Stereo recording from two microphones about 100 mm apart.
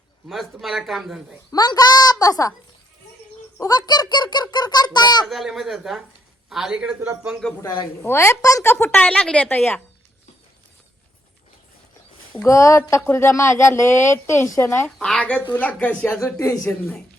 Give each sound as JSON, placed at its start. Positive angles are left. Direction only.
{"t": 0.3, "sound": "speech", "side_deg": 0}
{"t": 1.5, "sound": "a woman's voice", "side_deg": 40}
{"t": 3.6, "sound": "a child's voice", "side_deg": 40}
{"t": 5.2, "sound": "a man's voice", "side_deg": 0}
{"t": 7.6, "sound": "a woman's voice", "side_deg": 40}
{"t": 8.0, "sound": "speech", "side_deg": 25}
{"t": 8.6, "sound": "speech", "side_deg": 20}
{"t": 9.5, "sound": "speech", "side_deg": 20}
{"t": 12.5, "sound": "speech", "side_deg": 30}
{"t": 14.8, "sound": "speech", "side_deg": 5}
{"t": 16.2, "sound": "speech", "side_deg": 30}